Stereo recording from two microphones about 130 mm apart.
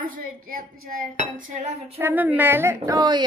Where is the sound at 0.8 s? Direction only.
80° right.